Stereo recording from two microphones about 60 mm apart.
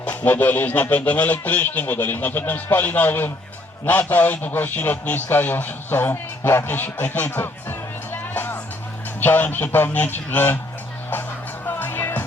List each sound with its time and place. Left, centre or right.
0.1 s speech: left
11.1 s music: left